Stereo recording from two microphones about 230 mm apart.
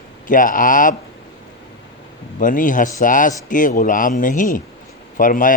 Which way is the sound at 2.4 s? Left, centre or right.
Left.